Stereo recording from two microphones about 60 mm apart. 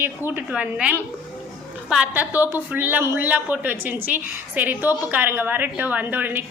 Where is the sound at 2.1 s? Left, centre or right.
Right.